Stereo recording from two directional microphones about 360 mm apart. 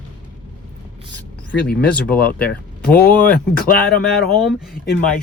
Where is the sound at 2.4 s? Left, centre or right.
Centre.